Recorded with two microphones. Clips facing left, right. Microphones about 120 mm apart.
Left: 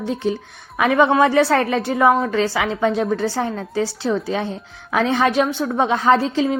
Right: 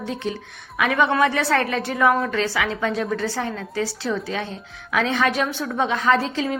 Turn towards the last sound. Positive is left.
turn(degrees=30)  # may be behind; listen again after turning